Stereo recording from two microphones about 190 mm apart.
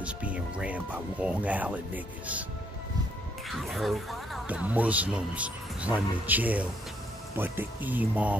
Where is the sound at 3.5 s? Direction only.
Centre (ahead or behind).